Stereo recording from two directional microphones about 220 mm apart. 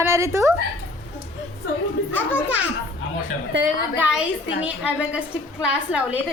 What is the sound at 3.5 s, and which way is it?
Speech, 50° right (ahead or behind).